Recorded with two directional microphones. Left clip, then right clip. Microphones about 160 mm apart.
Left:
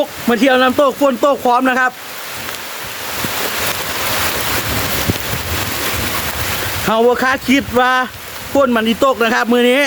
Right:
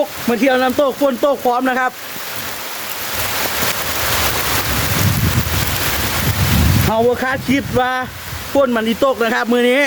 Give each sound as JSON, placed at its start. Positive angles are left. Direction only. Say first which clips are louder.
{"t": 0.3, "sound": "speech", "louder": "left 3 dB", "side_deg": 20}
{"t": 6.9, "sound": "speech", "louder": "left 4 dB", "side_deg": 25}